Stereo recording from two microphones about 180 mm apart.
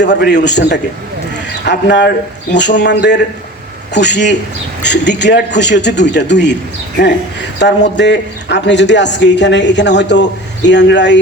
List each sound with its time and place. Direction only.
0.0 s a man's voice: 70° left (ahead or behind)
7.9 s a man's voice: 75° left (ahead or behind)